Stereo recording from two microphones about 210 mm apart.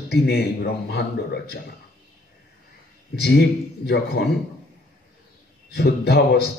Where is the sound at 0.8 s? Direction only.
50° left (ahead or behind).